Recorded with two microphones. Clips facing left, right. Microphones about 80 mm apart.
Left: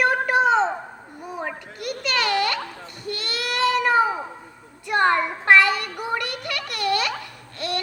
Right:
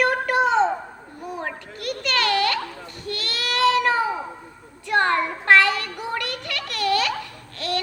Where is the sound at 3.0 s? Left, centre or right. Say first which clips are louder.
Even; centre.